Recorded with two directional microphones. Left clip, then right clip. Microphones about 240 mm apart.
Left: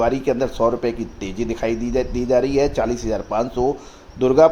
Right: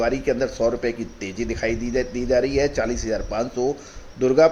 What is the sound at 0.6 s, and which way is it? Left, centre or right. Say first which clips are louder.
Speech: left 4 dB; left.